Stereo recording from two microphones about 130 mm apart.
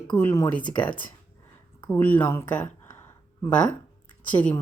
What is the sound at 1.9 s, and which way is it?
A woman's voice, 15° left (ahead or behind).